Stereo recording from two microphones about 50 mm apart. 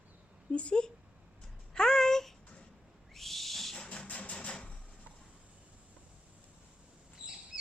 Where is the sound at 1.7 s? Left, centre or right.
Centre.